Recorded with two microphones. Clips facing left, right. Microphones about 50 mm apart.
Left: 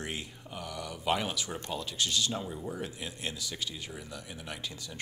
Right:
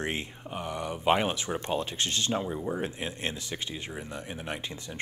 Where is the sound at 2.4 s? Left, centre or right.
Right.